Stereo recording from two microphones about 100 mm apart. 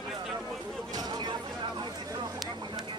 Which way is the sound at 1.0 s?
45° right (ahead or behind).